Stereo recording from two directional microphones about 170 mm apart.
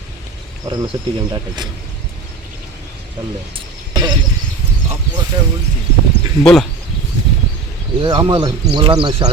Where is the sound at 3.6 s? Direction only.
25° right (ahead or behind).